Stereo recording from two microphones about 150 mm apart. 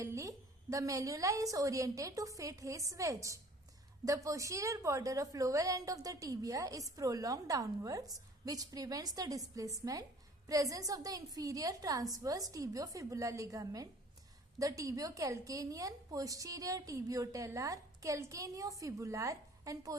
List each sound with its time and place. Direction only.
0.0 s a woman's voice: 20° right (ahead or behind)